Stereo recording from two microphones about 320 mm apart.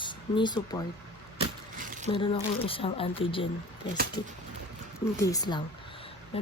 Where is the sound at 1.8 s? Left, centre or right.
Right.